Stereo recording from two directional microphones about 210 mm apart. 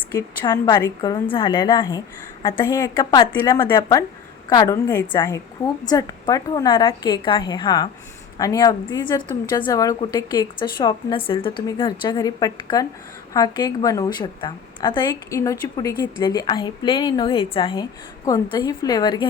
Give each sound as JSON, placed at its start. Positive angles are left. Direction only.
{"t": 0.2, "sound": "a woman's voice", "side_deg": 15}